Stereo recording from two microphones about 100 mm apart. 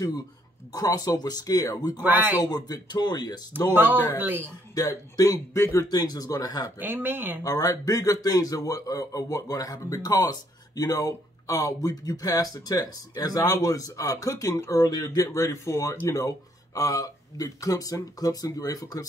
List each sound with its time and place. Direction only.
0.7 s speech: 40° left (ahead or behind)
4.2 s speech: 20° right (ahead or behind)
4.7 s speech: 35° left (ahead or behind)
6.8 s speech: 20° right (ahead or behind)
7.4 s speech: 35° left (ahead or behind)